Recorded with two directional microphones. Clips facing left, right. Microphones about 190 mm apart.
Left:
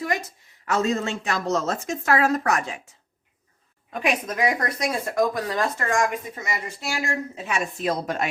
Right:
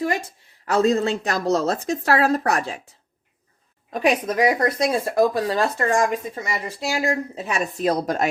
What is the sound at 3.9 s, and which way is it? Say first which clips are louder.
A woman's voice: right 5 dB; 35° right (ahead or behind).